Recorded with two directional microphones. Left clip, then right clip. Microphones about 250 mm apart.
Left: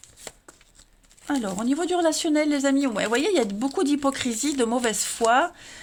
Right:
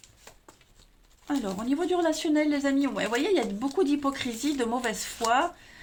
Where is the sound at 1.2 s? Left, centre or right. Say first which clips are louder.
Left 4 dB; left.